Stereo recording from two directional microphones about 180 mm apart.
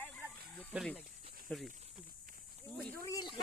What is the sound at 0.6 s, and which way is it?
Speech, centre (ahead or behind).